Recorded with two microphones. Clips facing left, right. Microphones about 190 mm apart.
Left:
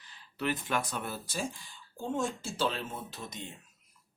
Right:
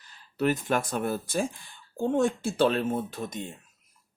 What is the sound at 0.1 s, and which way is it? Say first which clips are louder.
Speech: right 7 dB; 45° right (ahead or behind).